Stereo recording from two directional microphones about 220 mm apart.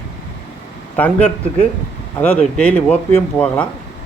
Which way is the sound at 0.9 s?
5° left (ahead or behind).